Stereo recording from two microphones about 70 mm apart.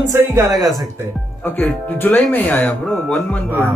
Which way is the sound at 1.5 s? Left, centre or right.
Left.